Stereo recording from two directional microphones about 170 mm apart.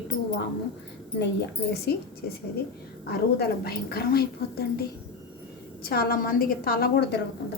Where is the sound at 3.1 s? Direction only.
65° left (ahead or behind).